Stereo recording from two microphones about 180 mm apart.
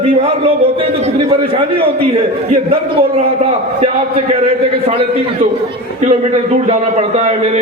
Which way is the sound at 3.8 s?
35° right (ahead or behind).